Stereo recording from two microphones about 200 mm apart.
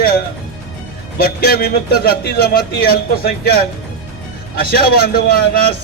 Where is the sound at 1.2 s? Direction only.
50° left (ahead or behind).